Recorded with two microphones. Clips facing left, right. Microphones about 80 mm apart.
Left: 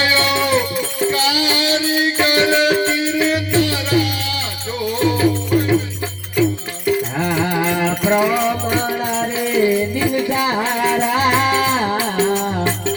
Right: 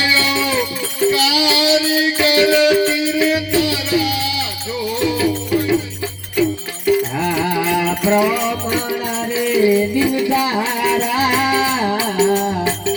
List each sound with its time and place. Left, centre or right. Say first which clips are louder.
0.0 s music: left 1 dB; left
7.3 s music: right 1 dB; left